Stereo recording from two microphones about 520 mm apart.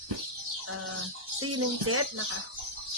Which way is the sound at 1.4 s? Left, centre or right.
Right.